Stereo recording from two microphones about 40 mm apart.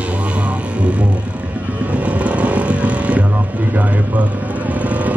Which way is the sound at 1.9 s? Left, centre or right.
Right.